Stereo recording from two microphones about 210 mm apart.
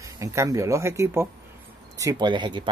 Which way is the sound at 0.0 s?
15° right (ahead or behind).